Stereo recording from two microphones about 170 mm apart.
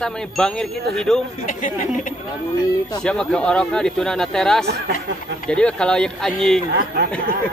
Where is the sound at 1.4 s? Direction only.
50° left (ahead or behind).